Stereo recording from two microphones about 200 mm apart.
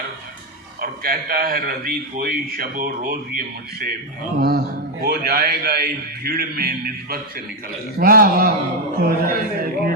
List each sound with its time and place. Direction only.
0.8 s a man's voice: 45° right (ahead or behind)